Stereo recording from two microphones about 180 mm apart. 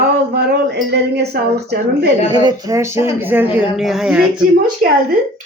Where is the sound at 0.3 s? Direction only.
65° right (ahead or behind).